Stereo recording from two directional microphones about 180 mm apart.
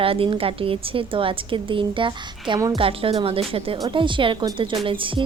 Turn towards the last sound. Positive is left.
turn(degrees=-30)  # may be behind; listen again after turning